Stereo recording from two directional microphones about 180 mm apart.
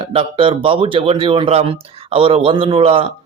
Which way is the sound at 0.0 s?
30° right (ahead or behind).